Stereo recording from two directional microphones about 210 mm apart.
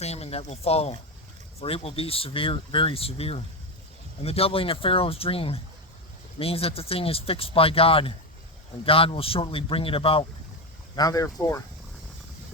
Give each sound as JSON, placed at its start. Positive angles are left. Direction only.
{"t": 0.0, "sound": "speech", "side_deg": 30}